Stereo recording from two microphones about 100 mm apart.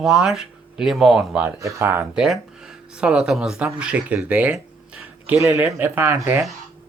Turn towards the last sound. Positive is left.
turn(degrees=-20)  # may be behind; listen again after turning